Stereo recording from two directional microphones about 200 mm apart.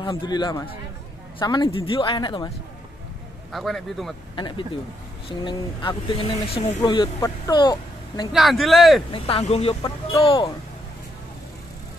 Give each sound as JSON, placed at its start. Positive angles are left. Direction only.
{"t": 0.0, "sound": "speech", "side_deg": 20}
{"t": 3.5, "sound": "speech", "side_deg": 0}
{"t": 4.4, "sound": "speech", "side_deg": 25}
{"t": 8.3, "sound": "speech", "side_deg": 0}
{"t": 9.1, "sound": "speech", "side_deg": 30}